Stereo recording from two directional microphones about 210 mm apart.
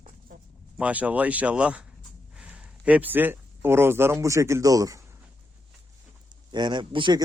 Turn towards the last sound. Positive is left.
turn(degrees=-20)  # may be behind; listen again after turning